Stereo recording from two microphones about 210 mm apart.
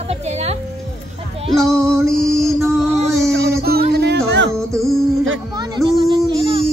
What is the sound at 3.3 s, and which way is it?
Music, 50° right (ahead or behind).